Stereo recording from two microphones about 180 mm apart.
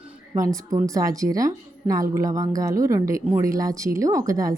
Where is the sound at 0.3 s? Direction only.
20° right (ahead or behind).